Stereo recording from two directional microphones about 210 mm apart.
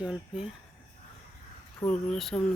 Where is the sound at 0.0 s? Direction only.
5° right (ahead or behind).